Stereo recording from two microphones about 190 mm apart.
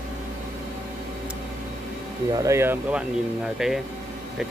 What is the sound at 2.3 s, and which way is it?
Speech, 15° right (ahead or behind).